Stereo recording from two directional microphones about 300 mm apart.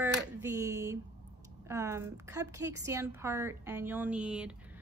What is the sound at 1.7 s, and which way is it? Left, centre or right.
A woman's voice, centre.